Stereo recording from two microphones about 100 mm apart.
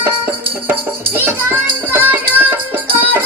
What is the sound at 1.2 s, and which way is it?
Music, 20° right (ahead or behind).